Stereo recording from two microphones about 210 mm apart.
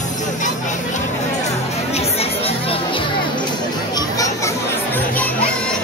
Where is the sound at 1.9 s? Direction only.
30° left (ahead or behind).